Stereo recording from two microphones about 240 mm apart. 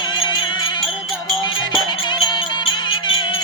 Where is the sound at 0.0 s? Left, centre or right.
Centre.